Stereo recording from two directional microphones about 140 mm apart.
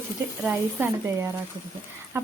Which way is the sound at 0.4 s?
15° right (ahead or behind).